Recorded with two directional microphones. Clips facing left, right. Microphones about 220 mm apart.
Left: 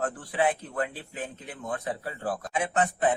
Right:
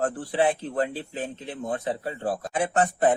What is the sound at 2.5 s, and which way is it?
Speech, 35° right (ahead or behind).